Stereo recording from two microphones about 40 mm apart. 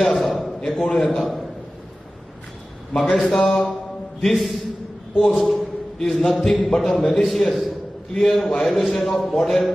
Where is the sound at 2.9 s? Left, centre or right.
Centre.